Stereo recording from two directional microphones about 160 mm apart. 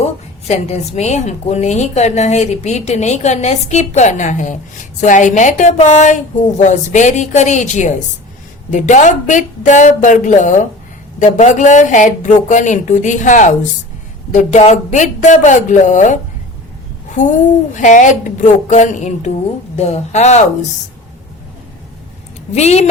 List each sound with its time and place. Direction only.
0.0 s a woman's voice: 45° left (ahead or behind)
22.5 s a woman's voice: 45° left (ahead or behind)